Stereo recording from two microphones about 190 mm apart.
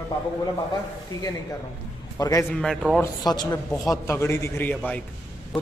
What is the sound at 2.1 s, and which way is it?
Speech, 15° left (ahead or behind).